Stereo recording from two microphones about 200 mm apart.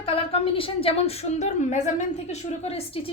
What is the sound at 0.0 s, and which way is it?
A woman's voice, 30° left (ahead or behind).